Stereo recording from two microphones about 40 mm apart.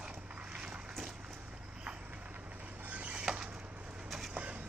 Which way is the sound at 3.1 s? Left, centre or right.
Right.